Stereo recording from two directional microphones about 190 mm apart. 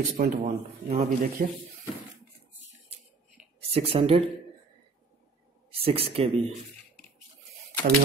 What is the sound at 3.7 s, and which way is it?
Speech, 30° right (ahead or behind).